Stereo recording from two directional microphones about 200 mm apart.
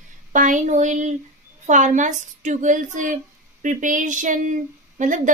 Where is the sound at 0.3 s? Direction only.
40° right (ahead or behind).